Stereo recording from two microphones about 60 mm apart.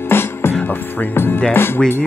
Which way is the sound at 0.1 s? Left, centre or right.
Left.